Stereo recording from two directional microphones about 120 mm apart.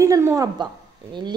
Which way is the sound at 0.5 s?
40° right (ahead or behind).